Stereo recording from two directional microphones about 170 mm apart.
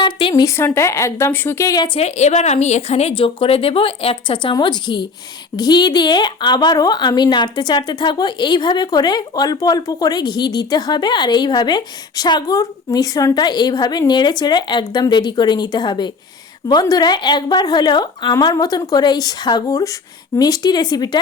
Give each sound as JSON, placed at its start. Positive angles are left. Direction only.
{"t": 0.0, "sound": "a sound", "side_deg": 30}
{"t": 0.4, "sound": "a woman's voice", "side_deg": 15}
{"t": 2.0, "sound": "a woman's voice", "side_deg": 40}